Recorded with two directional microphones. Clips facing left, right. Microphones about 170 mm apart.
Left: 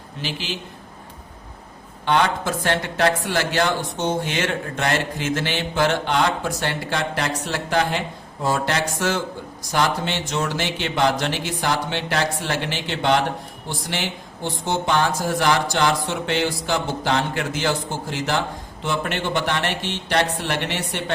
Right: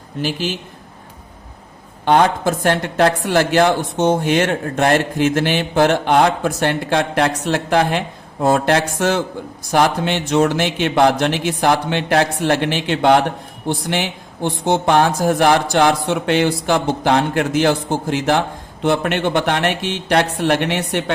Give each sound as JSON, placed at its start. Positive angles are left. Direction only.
{"t": 0.2, "sound": "a woman's voice", "side_deg": -45}
{"t": 2.0, "sound": "a woman's voice", "side_deg": -50}
{"t": 14.4, "sound": "speech", "side_deg": -60}